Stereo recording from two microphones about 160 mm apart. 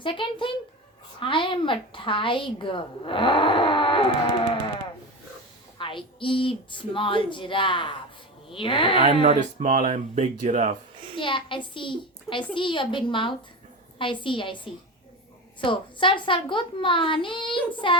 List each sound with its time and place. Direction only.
0.0 s a woman's voice: 30° left (ahead or behind)
5.7 s a woman's voice: 30° left (ahead or behind)
9.2 s speech: 50° right (ahead or behind)
11.2 s a woman's voice: 30° left (ahead or behind)